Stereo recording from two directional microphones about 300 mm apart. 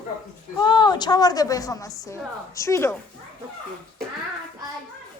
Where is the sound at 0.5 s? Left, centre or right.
Centre.